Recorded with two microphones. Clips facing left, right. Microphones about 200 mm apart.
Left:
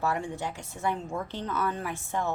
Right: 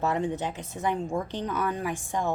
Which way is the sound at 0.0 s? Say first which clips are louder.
Right 3 dB; 20° right (ahead or behind).